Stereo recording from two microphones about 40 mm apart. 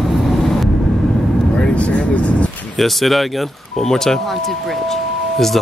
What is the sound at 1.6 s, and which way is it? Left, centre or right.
Vehicle, left.